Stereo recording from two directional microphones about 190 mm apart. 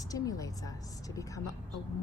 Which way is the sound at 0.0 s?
20° left (ahead or behind).